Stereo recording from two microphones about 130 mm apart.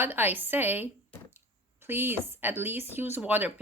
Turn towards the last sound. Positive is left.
turn(degrees=-15)  # may be behind; listen again after turning